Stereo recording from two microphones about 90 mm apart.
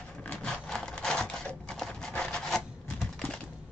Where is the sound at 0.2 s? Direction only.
15° left (ahead or behind).